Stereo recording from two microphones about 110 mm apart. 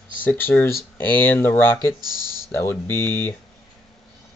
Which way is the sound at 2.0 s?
35° right (ahead or behind).